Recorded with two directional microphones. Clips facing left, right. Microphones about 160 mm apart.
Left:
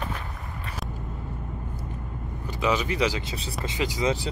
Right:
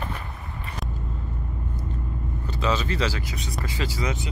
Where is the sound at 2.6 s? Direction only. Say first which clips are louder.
Left 1 dB; 15° left (ahead or behind).